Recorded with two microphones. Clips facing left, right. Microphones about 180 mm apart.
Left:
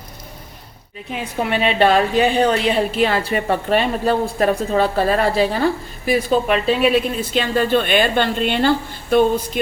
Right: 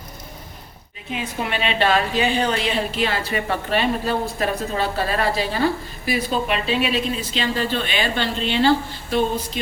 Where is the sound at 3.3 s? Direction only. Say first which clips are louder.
Left 5 dB; 45° left (ahead or behind).